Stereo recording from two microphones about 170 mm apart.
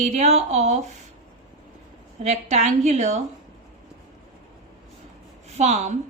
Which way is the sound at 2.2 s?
40° right (ahead or behind).